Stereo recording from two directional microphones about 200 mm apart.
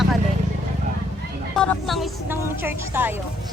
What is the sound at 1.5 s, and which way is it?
Speech, 5° left (ahead or behind).